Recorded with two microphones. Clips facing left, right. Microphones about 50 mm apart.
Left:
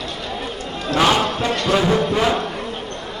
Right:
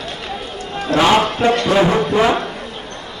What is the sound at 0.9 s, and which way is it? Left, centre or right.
A man's voice, right.